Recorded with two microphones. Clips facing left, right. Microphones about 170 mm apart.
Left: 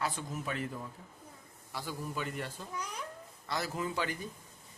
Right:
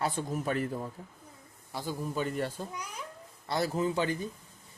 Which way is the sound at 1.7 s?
25° right (ahead or behind).